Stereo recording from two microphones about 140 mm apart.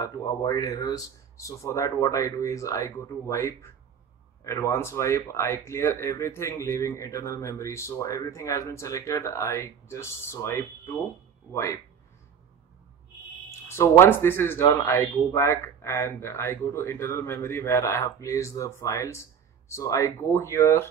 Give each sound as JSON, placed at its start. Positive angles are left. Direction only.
{"t": 0.0, "sound": "speech", "side_deg": 25}
{"t": 11.5, "sound": "speech", "side_deg": 20}
{"t": 13.5, "sound": "speech", "side_deg": 20}